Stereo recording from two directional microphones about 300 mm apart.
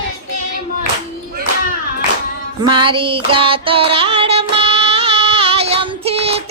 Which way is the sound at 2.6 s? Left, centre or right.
Centre.